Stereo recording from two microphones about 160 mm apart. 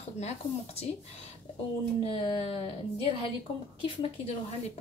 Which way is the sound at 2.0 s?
35° left (ahead or behind).